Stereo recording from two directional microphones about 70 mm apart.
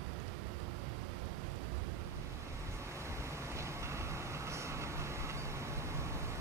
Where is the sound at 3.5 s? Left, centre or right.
Right.